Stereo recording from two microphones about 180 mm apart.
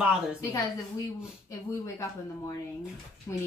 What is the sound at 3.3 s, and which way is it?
Speech, 15° left (ahead or behind).